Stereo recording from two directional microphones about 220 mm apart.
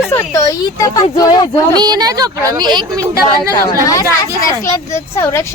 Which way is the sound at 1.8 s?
20° right (ahead or behind).